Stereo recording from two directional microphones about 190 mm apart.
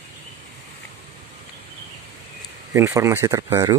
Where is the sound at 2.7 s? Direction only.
15° right (ahead or behind).